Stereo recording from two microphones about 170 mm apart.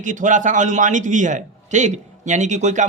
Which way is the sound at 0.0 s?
45° right (ahead or behind).